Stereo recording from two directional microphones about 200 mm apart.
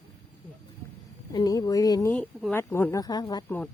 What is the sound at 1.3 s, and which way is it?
Speech, 20° left (ahead or behind).